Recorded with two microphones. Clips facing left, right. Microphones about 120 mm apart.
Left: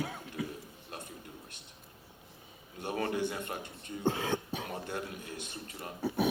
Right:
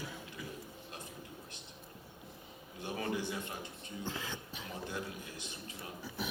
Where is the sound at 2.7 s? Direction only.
55° left (ahead or behind).